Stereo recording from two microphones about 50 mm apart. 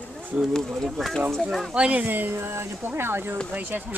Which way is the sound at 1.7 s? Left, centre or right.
Right.